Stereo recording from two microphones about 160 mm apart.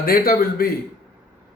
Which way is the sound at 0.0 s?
65° left (ahead or behind).